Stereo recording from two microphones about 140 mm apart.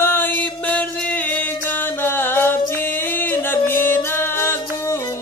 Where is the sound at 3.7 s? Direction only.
15° left (ahead or behind).